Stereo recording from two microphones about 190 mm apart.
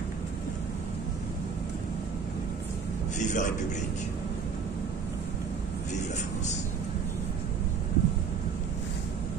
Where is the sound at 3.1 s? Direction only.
40° left (ahead or behind).